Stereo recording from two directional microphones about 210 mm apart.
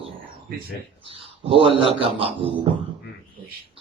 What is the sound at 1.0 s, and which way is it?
A man's voice, 25° right (ahead or behind).